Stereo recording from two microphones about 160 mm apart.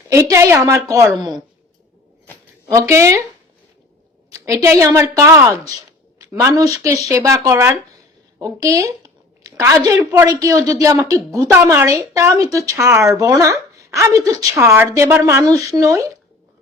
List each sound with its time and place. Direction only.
0.1 s a woman's voice: 15° right (ahead or behind)
2.2 s a sound: 10° left (ahead or behind)
2.7 s a woman's voice: 20° right (ahead or behind)
4.3 s a woman's voice: 20° right (ahead or behind)